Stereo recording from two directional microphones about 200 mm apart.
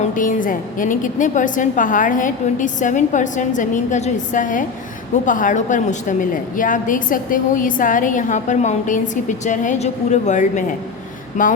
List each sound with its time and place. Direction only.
0.0 s a woman's voice: 40° left (ahead or behind)